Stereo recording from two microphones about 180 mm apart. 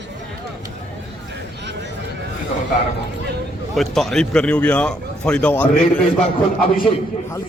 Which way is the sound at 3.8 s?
Centre (ahead or behind).